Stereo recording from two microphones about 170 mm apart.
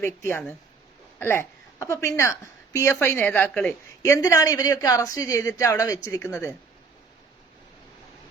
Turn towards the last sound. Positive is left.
turn(degrees=15)  # may be behind; listen again after turning